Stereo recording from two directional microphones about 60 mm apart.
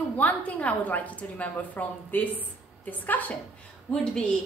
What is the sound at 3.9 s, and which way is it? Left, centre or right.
Speech, centre.